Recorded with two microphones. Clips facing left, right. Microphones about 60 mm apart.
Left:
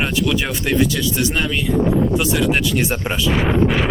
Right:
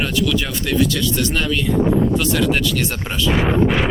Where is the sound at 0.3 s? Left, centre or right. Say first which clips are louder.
Left 1 dB; centre.